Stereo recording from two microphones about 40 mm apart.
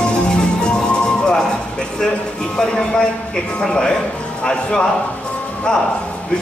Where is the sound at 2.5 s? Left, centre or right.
Centre.